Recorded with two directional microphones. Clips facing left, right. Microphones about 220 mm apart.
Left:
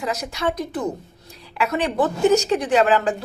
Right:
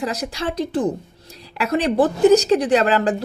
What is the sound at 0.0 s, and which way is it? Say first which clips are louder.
A woman's voice: even; 35° right (ahead or behind).